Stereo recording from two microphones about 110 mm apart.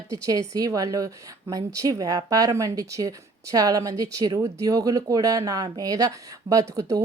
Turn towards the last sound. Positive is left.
turn(degrees=-30)  # may be behind; listen again after turning